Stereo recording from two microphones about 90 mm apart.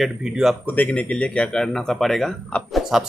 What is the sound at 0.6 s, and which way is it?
Speech, 15° left (ahead or behind).